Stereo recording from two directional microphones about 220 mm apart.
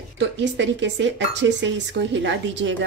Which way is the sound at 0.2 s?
55° right (ahead or behind).